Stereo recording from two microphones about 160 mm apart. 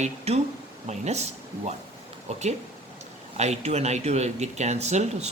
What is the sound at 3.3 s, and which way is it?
Speech, 45° right (ahead or behind).